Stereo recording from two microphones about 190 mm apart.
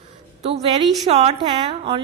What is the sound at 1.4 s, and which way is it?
Speech, 25° right (ahead or behind).